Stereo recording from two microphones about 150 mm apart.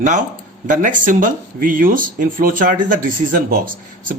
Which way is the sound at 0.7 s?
60° right (ahead or behind).